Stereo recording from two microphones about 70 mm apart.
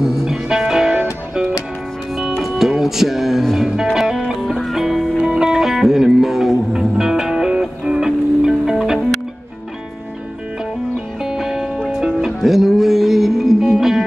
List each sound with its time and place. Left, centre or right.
0.0 s music: centre
2.4 s music: centre
11.2 s music: centre